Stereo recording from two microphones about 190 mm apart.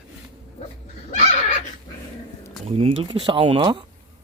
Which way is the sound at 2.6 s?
30° right (ahead or behind).